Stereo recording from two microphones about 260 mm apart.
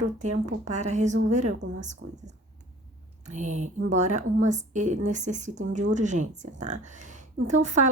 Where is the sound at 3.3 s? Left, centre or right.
Right.